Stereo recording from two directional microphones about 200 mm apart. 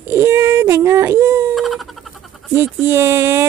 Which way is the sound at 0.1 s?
10° right (ahead or behind).